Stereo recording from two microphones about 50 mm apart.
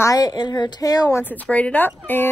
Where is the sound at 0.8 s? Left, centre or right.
Left.